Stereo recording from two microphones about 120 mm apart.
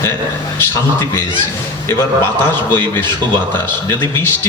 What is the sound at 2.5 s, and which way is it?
A man's voice, 20° left (ahead or behind).